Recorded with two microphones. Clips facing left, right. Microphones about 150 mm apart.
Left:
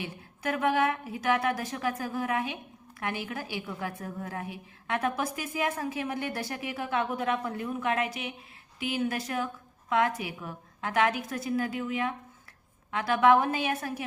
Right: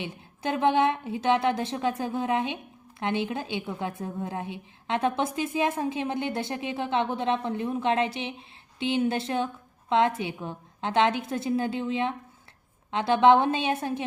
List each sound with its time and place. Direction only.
0.0 s a woman's voice: 25° right (ahead or behind)